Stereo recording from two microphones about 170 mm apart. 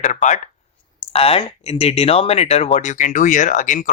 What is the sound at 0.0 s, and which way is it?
Speech, 45° left (ahead or behind).